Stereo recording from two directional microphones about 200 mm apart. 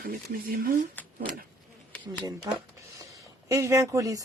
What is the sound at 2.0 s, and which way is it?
Speech, 20° right (ahead or behind).